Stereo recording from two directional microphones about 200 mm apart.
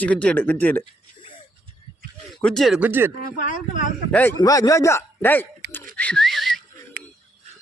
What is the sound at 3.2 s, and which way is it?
Speech, 40° left (ahead or behind).